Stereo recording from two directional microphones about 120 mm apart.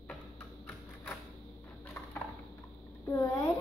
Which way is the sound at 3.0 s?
25° left (ahead or behind).